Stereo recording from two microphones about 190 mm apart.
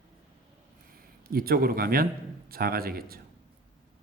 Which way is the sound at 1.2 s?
50° right (ahead or behind).